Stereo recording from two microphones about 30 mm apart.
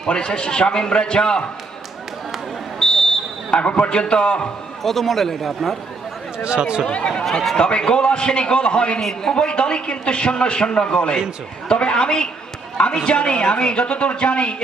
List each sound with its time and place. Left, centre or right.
0.1 s a man's voice: left
2.7 s a sound: left
3.5 s a man's voice: left
4.8 s speech: centre
6.4 s speech: right
6.8 s a man's voice: left
9.0 s speech: centre
9.3 s a man's voice: left